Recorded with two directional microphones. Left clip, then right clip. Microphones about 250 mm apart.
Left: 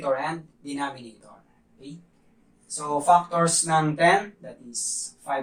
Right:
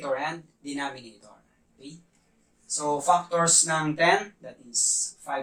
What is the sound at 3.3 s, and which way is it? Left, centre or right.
Speech, right.